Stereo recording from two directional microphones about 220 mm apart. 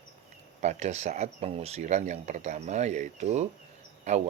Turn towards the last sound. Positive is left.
turn(degrees=-30)  # may be behind; listen again after turning